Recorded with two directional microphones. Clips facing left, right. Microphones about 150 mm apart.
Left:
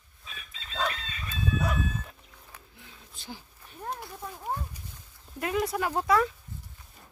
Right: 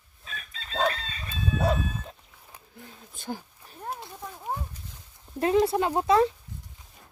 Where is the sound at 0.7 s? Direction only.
35° right (ahead or behind).